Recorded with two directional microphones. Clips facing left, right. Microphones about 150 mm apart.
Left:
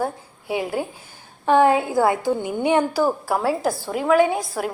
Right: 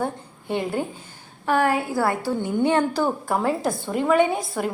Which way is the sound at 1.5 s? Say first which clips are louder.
Left 5 dB; 20° left (ahead or behind).